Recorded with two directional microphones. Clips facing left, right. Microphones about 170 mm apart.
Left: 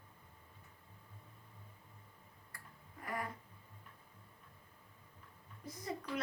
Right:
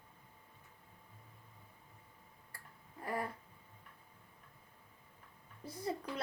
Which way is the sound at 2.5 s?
30° right (ahead or behind).